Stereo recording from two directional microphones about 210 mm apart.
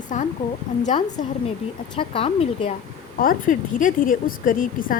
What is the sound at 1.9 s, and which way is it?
Speech, 25° left (ahead or behind).